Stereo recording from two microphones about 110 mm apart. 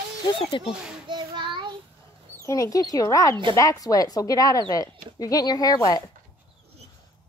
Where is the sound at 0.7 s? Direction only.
10° right (ahead or behind).